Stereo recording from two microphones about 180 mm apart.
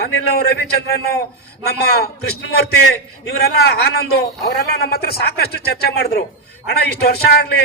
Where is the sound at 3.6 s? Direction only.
60° left (ahead or behind).